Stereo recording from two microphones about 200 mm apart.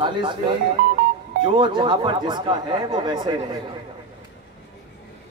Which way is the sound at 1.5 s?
25° right (ahead or behind).